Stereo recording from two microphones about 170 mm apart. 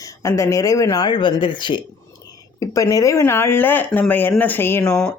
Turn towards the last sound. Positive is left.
turn(degrees=5)  # may be behind; listen again after turning